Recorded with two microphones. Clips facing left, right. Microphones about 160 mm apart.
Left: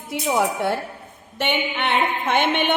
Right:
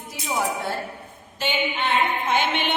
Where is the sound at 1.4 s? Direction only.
65° left (ahead or behind).